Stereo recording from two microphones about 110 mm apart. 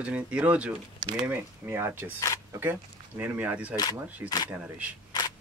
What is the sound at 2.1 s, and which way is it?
Speech, 25° left (ahead or behind).